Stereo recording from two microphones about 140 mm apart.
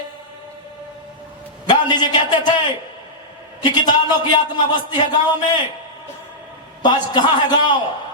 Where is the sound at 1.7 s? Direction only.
30° left (ahead or behind).